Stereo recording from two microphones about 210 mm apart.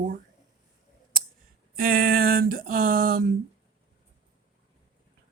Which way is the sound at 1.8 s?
45° right (ahead or behind).